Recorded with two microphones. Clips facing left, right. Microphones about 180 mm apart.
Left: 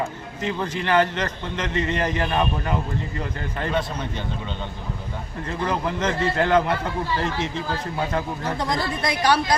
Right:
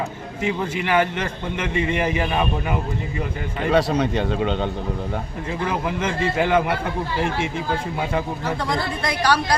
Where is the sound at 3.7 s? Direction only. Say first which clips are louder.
Right 11 dB; 80° right.